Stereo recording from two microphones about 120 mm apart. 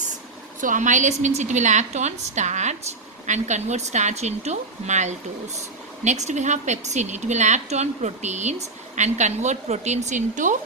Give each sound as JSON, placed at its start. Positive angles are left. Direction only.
{"t": 0.6, "sound": "a woman's voice", "side_deg": -90}